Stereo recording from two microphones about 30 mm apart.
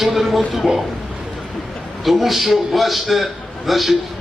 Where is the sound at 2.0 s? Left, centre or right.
Centre.